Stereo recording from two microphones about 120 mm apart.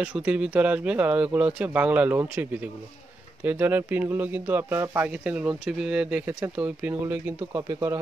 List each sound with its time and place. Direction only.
0.0 s speech: 10° right (ahead or behind); by 8.0 s 25° right (ahead or behind)